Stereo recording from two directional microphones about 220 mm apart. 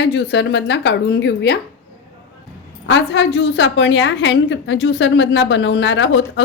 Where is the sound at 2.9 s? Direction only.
55° left (ahead or behind).